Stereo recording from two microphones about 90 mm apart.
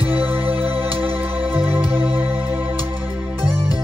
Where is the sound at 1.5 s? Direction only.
25° right (ahead or behind).